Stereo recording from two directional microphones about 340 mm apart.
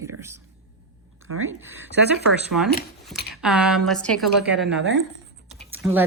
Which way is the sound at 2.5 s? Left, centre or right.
Right.